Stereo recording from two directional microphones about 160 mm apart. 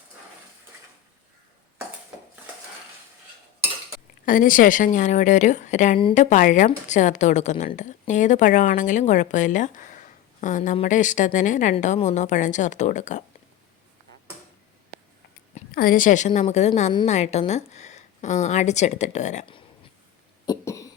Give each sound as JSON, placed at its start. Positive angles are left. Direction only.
{"t": 4.3, "sound": "a woman's voice", "side_deg": 55}
{"t": 15.7, "sound": "a woman's voice", "side_deg": 65}
{"t": 20.5, "sound": "cough", "side_deg": 20}